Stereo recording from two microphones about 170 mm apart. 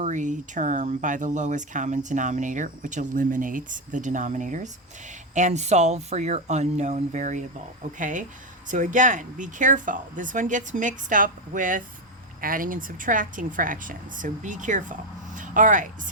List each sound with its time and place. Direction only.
0.0 s speech: 45° right (ahead or behind)